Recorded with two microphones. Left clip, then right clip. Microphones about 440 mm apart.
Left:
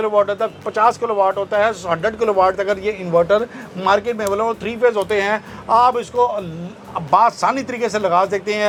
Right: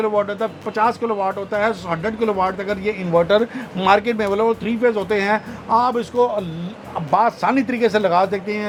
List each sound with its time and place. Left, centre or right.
0.0 s speech: left